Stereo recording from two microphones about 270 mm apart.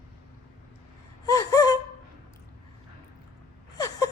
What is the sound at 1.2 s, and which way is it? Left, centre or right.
Gasp, centre.